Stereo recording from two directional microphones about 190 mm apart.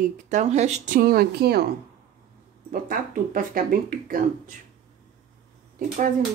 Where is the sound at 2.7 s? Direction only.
45° right (ahead or behind).